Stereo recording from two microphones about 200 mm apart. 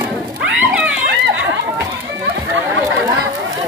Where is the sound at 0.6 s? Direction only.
5° right (ahead or behind).